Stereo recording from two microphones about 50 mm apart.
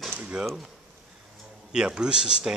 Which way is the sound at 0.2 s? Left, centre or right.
Right.